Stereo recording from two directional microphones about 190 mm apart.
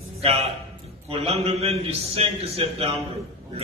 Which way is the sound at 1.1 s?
30° right (ahead or behind).